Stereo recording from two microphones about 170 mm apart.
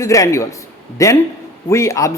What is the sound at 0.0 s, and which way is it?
A man's voice, 20° left (ahead or behind).